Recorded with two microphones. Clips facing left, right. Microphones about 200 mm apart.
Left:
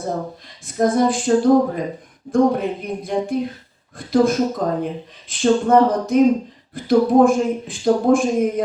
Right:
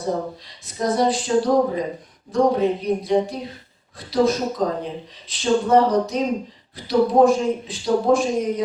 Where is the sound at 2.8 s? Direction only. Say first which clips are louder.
Right 3 dB; 50° left (ahead or behind).